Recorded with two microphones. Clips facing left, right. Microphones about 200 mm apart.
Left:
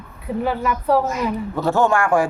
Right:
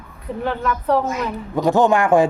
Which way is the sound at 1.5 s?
15° right (ahead or behind).